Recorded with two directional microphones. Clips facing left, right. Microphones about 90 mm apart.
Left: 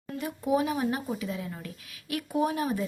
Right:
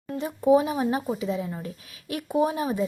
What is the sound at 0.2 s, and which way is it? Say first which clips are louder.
Speech: right 7 dB; 25° right (ahead or behind).